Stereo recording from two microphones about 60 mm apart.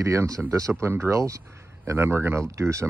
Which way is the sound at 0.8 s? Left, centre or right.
Right.